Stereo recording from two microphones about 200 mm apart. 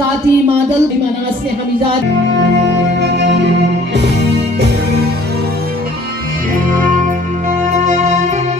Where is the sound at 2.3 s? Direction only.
60° right (ahead or behind).